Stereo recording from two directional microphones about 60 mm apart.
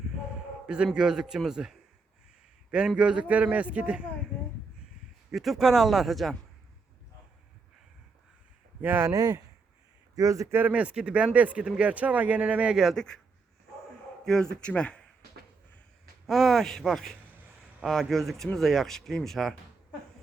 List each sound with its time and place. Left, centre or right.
0.9 s speech: centre
2.7 s speech: centre
5.3 s speech: centre
8.8 s speech: right
9.1 s speech: right
10.2 s a man's voice: right
10.9 s speech: centre
12.7 s speech: centre
14.3 s speech: centre
16.2 s speech: centre